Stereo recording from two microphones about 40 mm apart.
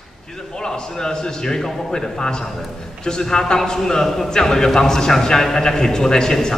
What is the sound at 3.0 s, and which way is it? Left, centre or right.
A man's voice, centre.